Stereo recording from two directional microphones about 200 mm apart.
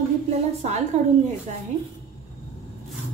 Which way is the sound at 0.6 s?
35° right (ahead or behind).